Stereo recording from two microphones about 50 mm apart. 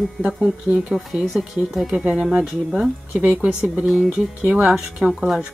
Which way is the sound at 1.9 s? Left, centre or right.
Right.